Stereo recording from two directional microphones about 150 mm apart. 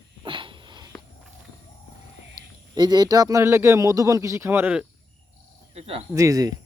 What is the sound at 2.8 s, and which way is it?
Speech, 25° right (ahead or behind).